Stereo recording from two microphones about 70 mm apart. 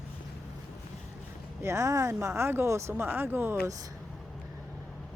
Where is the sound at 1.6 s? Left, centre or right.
Right.